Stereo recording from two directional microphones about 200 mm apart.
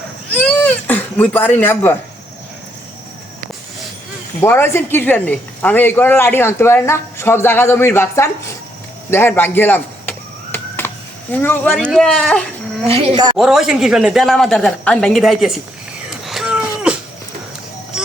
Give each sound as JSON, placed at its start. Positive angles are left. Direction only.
{"t": 0.3, "sound": "speech", "side_deg": 5}
{"t": 4.4, "sound": "speech", "side_deg": 10}
{"t": 9.0, "sound": "a sound", "side_deg": 10}
{"t": 12.9, "sound": "speech", "side_deg": -30}
{"t": 13.3, "sound": "speech", "side_deg": 0}
{"t": 16.0, "sound": "a sound", "side_deg": 0}